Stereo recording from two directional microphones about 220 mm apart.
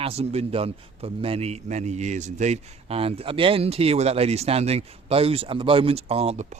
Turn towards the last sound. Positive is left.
turn(degrees=-30)  # may be behind; listen again after turning